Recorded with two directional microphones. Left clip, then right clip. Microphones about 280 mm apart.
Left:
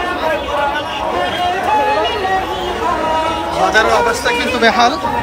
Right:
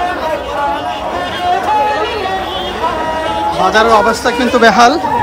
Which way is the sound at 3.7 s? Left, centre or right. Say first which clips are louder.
Right 4 dB; centre.